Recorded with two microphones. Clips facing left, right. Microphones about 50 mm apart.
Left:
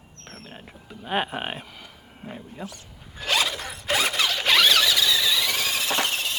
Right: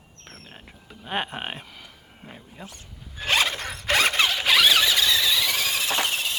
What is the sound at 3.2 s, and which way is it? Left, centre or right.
Zipper, right.